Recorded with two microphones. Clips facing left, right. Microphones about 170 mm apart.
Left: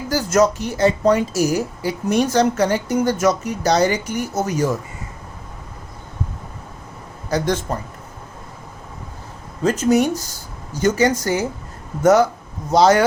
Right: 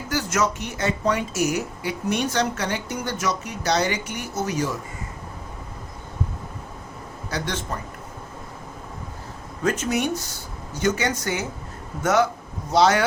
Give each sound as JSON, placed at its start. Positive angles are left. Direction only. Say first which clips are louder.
{"t": 0.1, "sound": "speech", "louder": "left 7 dB", "side_deg": 40}
{"t": 7.3, "sound": "a man's voice", "louder": "left 9 dB", "side_deg": 45}
{"t": 9.6, "sound": "speech", "louder": "left 7 dB", "side_deg": 40}
{"t": 12.7, "sound": "speech", "louder": "left 5 dB", "side_deg": 40}